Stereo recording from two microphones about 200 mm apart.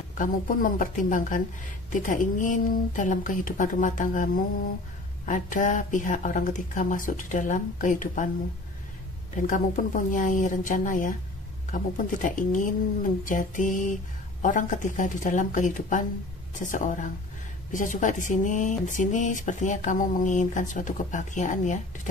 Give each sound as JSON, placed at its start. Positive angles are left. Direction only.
{"t": 0.1, "sound": "speech", "side_deg": 40}
{"t": 9.5, "sound": "speech", "side_deg": 40}